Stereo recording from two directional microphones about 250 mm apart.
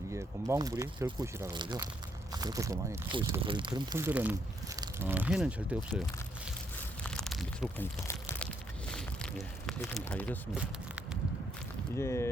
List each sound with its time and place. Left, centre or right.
0.1 s speech: centre
7.0 s a sound: centre
8.9 s speech: centre
11.9 s speech: centre